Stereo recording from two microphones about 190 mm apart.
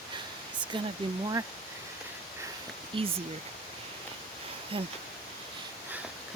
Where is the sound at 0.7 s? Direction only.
25° right (ahead or behind).